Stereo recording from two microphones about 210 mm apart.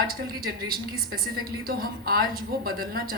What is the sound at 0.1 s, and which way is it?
A woman's voice, 45° right (ahead or behind).